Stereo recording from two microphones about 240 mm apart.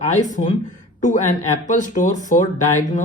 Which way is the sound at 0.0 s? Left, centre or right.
Left.